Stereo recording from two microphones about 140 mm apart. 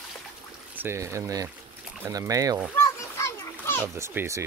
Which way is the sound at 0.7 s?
20° right (ahead or behind).